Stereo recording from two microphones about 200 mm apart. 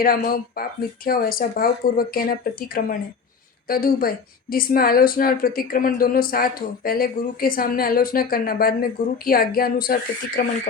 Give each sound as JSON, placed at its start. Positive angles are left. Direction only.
{"t": 0.0, "sound": "a woman's voice", "side_deg": 45}